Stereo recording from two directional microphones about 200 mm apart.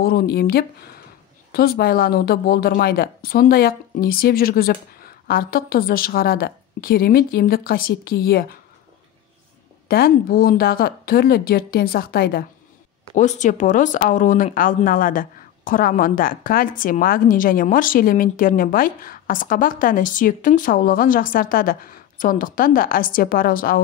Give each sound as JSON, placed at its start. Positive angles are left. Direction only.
{"t": 0.0, "sound": "speech", "side_deg": 50}
{"t": 9.8, "sound": "speech", "side_deg": 50}
{"t": 13.1, "sound": "speech", "side_deg": 35}